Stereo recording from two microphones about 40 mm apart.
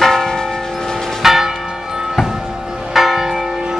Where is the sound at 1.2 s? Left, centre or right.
Centre.